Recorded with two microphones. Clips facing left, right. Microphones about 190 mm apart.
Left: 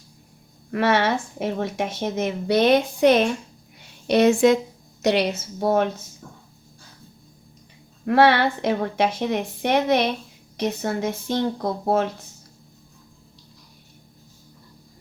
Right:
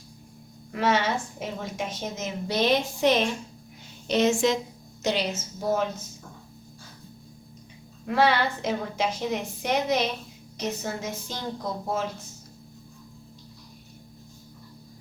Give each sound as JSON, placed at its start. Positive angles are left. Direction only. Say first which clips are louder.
{"t": 0.7, "sound": "a woman's voice", "louder": "left 4 dB", "side_deg": 60}
{"t": 8.0, "sound": "a woman's voice", "louder": "left 6 dB", "side_deg": 65}